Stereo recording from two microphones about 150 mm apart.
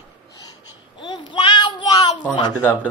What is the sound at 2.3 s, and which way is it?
Speech, 30° left (ahead or behind).